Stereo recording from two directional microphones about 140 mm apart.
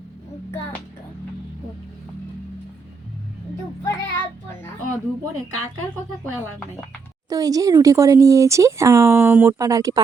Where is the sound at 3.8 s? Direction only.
20° left (ahead or behind).